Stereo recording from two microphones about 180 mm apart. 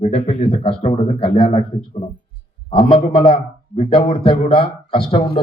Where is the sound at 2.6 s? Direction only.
30° left (ahead or behind).